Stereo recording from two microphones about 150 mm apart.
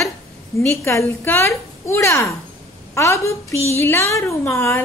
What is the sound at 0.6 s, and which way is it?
A woman's voice, 20° left (ahead or behind).